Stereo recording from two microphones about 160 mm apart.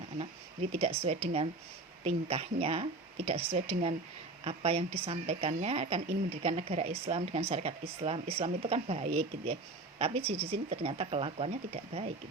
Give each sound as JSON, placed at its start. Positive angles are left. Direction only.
{"t": 0.7, "sound": "a woman's voice", "side_deg": -40}